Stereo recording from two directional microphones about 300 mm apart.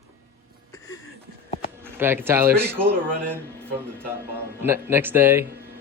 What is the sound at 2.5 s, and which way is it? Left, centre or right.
Speech, right.